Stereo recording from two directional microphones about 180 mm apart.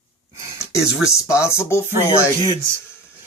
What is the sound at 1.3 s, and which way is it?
Speech, 15° left (ahead or behind).